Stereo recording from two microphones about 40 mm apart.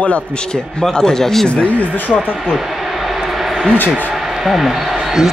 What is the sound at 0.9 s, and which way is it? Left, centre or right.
Speech, centre.